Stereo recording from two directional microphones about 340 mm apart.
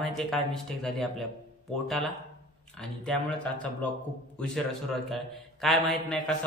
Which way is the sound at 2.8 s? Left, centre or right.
Centre.